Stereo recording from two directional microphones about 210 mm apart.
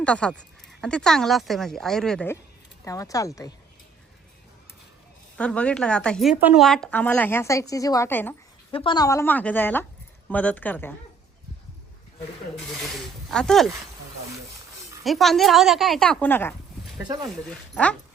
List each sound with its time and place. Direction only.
0.0 s speech: 5° left (ahead or behind)
5.4 s speech: 5° left (ahead or behind)
8.7 s speech: 25° left (ahead or behind)
13.3 s speech: 5° left (ahead or behind)
15.0 s speech: centre (ahead or behind)